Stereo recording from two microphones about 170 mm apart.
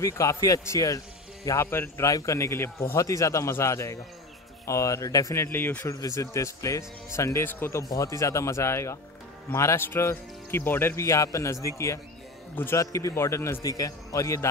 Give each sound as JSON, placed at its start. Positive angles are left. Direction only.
{"t": 0.0, "sound": "speech", "side_deg": 20}
{"t": 12.5, "sound": "speech", "side_deg": 15}